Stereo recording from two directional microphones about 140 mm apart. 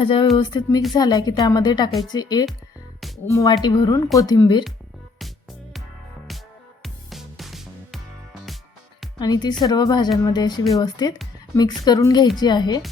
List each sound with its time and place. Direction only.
0.0 s a woman's voice: 35° left (ahead or behind)
6.8 s music: centre (ahead or behind)
9.1 s a woman's voice: 30° left (ahead or behind)